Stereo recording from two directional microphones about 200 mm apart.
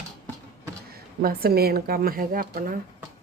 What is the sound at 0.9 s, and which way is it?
Speech, 50° right (ahead or behind).